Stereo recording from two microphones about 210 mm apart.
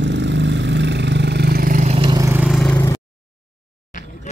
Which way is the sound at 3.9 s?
35° left (ahead or behind).